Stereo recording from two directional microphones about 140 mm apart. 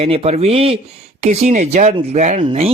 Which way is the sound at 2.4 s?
45° right (ahead or behind).